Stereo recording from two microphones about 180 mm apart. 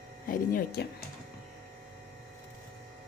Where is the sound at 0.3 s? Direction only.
55° left (ahead or behind).